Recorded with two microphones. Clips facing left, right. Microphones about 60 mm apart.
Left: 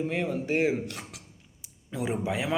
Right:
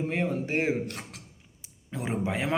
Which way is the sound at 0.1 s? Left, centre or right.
Right.